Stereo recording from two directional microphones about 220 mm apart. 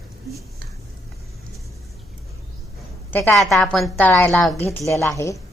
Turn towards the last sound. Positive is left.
turn(degrees=15)  # may be behind; listen again after turning